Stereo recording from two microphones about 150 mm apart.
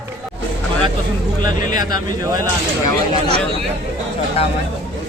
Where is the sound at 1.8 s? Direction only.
25° right (ahead or behind).